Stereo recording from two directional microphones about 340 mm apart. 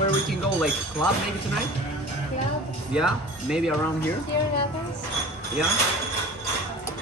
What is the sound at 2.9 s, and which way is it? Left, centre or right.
Speech, centre.